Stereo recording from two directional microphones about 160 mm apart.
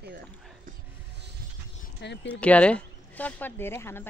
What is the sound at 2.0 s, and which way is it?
Speech, 90° left.